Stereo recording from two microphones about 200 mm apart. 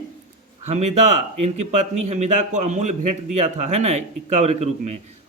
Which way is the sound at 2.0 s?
35° right (ahead or behind).